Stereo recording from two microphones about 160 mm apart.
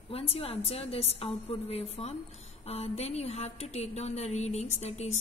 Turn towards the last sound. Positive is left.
turn(degrees=45)  # may be behind; listen again after turning